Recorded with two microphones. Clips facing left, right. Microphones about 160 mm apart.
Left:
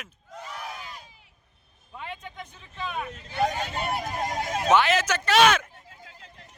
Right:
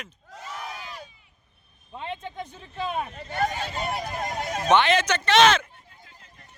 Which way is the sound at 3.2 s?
55° right (ahead or behind).